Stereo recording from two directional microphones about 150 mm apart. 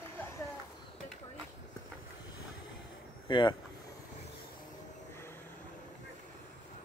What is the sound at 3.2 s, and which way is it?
Speech, 30° left (ahead or behind).